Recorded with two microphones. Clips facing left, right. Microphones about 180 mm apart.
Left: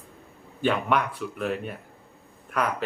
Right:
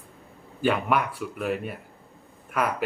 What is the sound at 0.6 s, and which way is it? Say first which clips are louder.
Speech: even; 5° right (ahead or behind).